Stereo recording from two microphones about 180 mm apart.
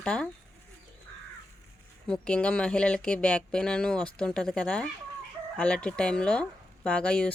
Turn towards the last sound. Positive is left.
turn(degrees=5)  # may be behind; listen again after turning